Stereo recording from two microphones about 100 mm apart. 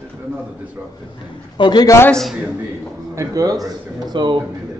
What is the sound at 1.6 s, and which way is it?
Speech, 50° left (ahead or behind).